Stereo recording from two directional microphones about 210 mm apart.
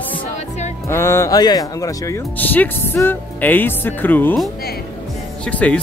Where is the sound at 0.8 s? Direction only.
15° left (ahead or behind).